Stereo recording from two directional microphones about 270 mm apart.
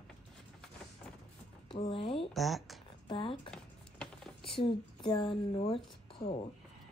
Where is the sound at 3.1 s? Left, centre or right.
Centre.